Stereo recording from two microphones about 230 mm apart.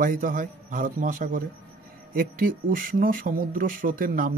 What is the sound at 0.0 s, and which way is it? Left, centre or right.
Speech, right.